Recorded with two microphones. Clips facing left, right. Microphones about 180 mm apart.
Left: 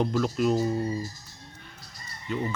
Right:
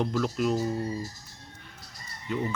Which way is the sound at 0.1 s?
Centre (ahead or behind).